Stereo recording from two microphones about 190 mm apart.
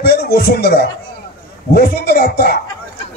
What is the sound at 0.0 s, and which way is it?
A man's voice, 60° left (ahead or behind).